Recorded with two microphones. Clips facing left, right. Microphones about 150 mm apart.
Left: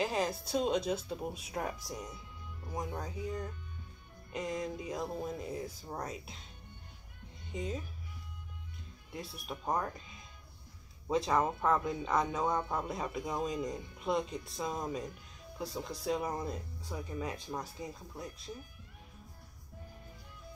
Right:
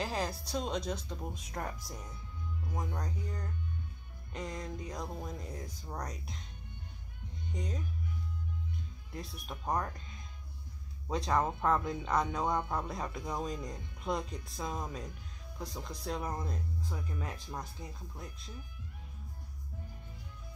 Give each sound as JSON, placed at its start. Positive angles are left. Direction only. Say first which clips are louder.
{"t": 0.0, "sound": "speech", "louder": "left 3 dB", "side_deg": 0}
{"t": 3.0, "sound": "speech", "louder": "left 3 dB", "side_deg": 5}
{"t": 7.5, "sound": "speech", "louder": "left 3 dB", "side_deg": 5}
{"t": 9.1, "sound": "speech", "louder": "left 2 dB", "side_deg": 0}